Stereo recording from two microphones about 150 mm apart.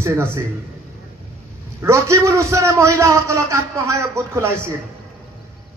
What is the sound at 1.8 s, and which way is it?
A man's voice, 20° right (ahead or behind).